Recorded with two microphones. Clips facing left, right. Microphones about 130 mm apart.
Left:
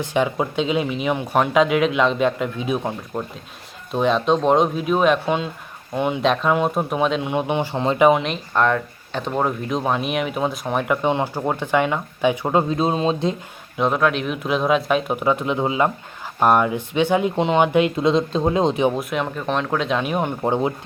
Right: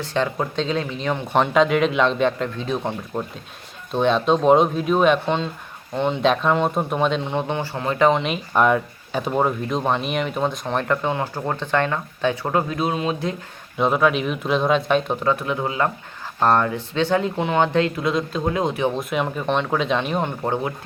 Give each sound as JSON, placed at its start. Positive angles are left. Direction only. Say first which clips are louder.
{"t": 0.0, "sound": "speech", "louder": "left 2 dB", "side_deg": 15}
{"t": 3.9, "sound": "speech", "louder": "even", "side_deg": 0}
{"t": 8.5, "sound": "speech", "louder": "right 1 dB", "side_deg": -10}
{"t": 12.6, "sound": "speech", "louder": "left 3 dB", "side_deg": 25}
{"t": 13.7, "sound": "speech", "louder": "right 1 dB", "side_deg": 0}
{"t": 18.9, "sound": "speech", "louder": "even", "side_deg": 0}